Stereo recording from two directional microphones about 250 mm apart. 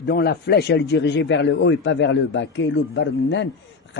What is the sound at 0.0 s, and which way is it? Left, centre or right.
Speech, left.